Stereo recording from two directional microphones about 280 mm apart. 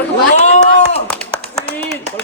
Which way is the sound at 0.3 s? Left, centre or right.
Left.